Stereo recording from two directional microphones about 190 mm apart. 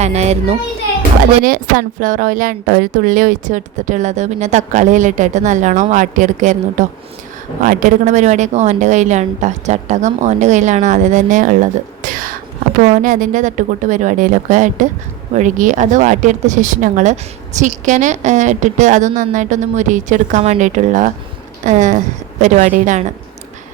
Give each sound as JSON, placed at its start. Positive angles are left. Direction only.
{"t": 0.0, "sound": "speech", "side_deg": -35}
{"t": 1.5, "sound": "speech", "side_deg": -45}